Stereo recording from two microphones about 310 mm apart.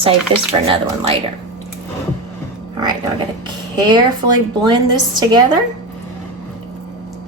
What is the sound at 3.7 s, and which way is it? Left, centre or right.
A woman's voice, centre.